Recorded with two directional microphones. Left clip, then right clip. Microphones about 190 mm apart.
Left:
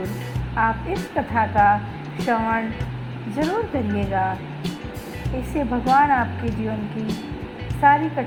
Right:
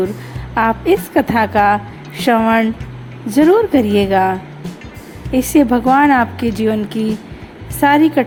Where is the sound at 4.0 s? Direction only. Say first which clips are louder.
Right 7 dB; 45° right (ahead or behind).